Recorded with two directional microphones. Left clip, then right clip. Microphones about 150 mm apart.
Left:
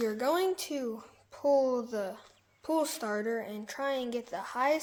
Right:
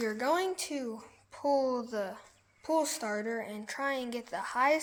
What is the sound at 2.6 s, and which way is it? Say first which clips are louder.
Speech: even; 25° left (ahead or behind).